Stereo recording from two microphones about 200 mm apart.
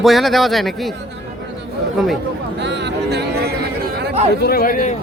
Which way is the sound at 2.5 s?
60° right (ahead or behind).